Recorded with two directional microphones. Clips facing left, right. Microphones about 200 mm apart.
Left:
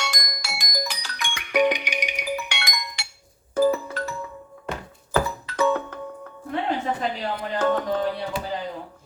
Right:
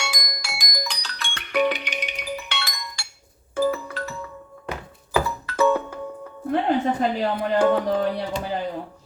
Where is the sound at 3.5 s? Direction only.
40° left (ahead or behind).